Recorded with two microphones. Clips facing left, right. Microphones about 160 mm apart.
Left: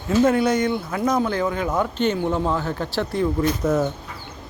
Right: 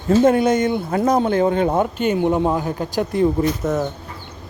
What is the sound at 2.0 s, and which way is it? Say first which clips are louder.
Speech: right 3 dB; 15° right (ahead or behind).